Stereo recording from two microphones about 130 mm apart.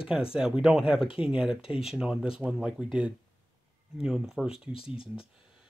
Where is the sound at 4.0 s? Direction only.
5° right (ahead or behind).